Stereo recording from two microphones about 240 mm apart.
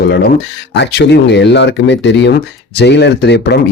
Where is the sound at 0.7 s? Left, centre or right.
Left.